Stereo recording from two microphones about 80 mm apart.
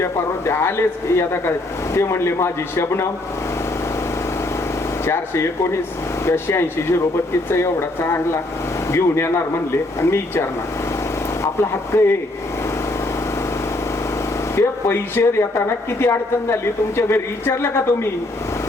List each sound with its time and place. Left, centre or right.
0.0 s speech: left
5.0 s speech: left
11.6 s speech: left
14.5 s speech: left